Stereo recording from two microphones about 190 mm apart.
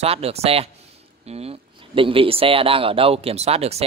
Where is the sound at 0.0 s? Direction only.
30° right (ahead or behind).